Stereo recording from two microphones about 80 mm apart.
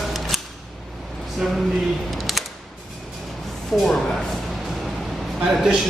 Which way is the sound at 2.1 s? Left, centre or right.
Centre.